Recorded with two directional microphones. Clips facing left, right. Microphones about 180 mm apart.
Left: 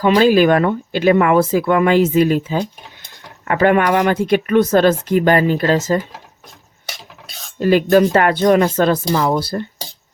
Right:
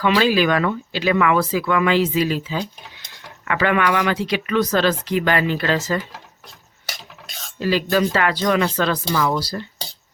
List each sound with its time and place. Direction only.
0.0 s speech: 45° left (ahead or behind)
7.6 s speech: 50° left (ahead or behind)